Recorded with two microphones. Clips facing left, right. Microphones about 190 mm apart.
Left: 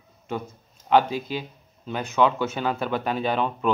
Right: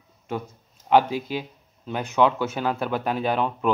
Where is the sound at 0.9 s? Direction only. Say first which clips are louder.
Right 1 dB; 10° right (ahead or behind).